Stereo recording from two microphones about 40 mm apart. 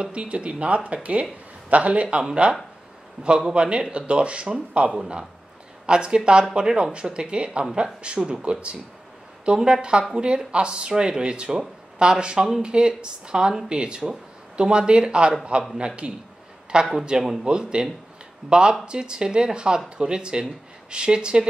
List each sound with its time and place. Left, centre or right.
0.0 s a man's voice: right
3.3 s speech: right
17.2 s speech: centre
17.5 s speech: right